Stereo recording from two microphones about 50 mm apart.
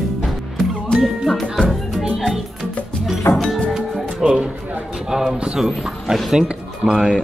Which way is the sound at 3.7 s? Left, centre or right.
Centre.